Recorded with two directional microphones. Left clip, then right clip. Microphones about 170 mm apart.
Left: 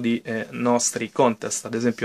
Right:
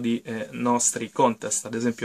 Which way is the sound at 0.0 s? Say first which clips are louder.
Left 3 dB; 35° left (ahead or behind).